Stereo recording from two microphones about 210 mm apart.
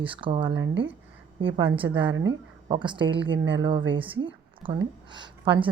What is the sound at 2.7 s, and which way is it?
Speech, 20° right (ahead or behind).